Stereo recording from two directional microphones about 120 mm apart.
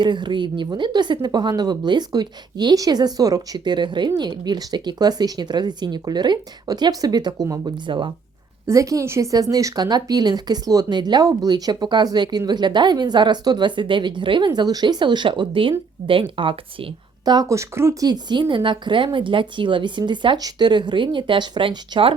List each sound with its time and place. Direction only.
0.0 s speech: 40° right (ahead or behind)
8.6 s speech: 25° right (ahead or behind)
18.1 s speech: 40° right (ahead or behind)